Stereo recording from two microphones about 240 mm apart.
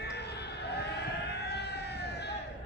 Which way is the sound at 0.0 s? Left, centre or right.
Left.